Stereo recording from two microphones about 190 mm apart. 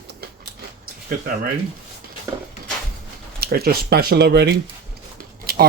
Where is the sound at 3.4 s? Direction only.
55° right (ahead or behind).